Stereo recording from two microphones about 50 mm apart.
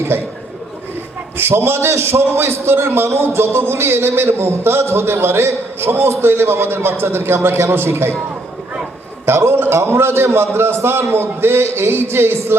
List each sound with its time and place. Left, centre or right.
0.1 s a man's voice: right
1.4 s a man's voice: right
1.9 s a man's voice: right
9.2 s a man's voice: right
10.5 s a man's voice: right